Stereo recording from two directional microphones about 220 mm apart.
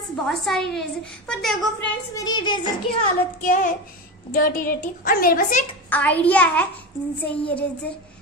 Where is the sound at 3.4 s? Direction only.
40° left (ahead or behind).